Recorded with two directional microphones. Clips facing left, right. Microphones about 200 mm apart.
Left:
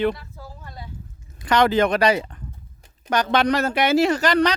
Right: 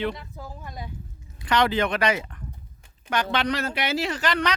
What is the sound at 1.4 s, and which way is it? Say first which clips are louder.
Speech: left 5 dB; 45° left (ahead or behind).